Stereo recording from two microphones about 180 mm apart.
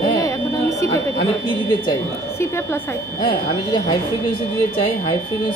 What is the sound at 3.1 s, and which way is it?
Speech, 30° left (ahead or behind).